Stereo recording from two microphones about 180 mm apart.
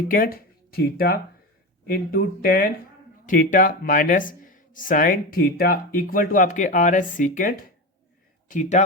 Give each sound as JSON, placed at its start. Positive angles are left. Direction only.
{"t": 0.1, "sound": "speech", "side_deg": 55}